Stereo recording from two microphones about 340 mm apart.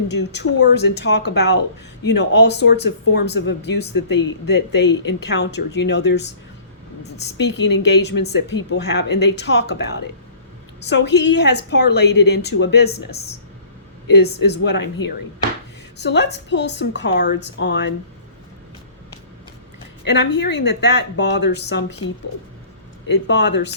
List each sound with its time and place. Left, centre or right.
0.1 s a woman's voice: left
7.3 s a woman's voice: left
8.3 s speech: left
8.5 s a woman's voice: left
14.4 s a woman's voice: left
20.1 s a woman's voice: left
23.0 s a woman's voice: left